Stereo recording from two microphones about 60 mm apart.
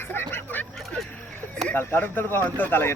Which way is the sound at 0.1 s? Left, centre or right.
Left.